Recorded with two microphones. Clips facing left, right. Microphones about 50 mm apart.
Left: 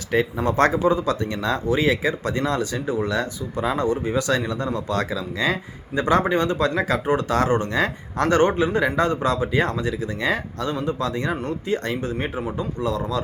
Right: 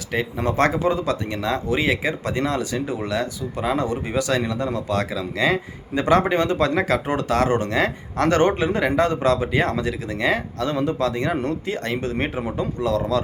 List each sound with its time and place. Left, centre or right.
0.1 s speech: right
4.3 s speech: right